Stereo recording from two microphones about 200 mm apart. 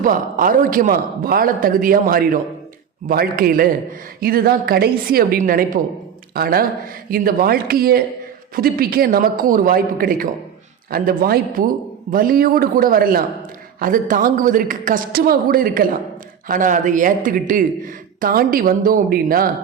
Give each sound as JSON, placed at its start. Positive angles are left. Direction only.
{"t": 0.0, "sound": "speech", "side_deg": -45}